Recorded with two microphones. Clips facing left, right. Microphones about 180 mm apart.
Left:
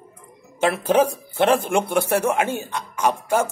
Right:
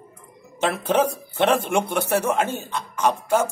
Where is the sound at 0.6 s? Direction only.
10° left (ahead or behind).